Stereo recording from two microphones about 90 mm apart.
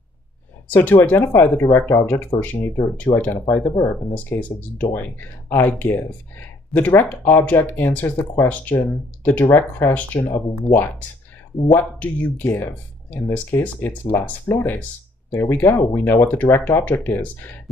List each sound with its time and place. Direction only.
0.7 s speech: 20° left (ahead or behind)
2.6 s speech: 30° left (ahead or behind)
15.5 s speech: 25° left (ahead or behind)